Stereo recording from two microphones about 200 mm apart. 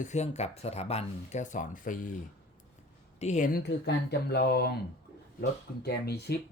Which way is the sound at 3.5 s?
55° left (ahead or behind).